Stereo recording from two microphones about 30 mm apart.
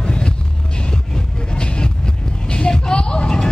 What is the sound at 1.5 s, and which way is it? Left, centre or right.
Vehicle, left.